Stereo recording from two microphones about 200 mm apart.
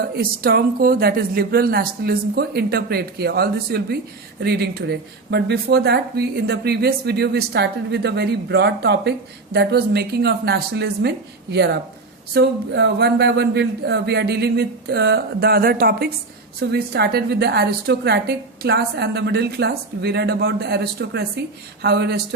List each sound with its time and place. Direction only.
0.2 s a woman's voice: 50° right (ahead or behind)